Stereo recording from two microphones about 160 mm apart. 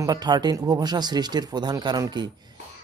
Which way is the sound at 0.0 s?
25° right (ahead or behind).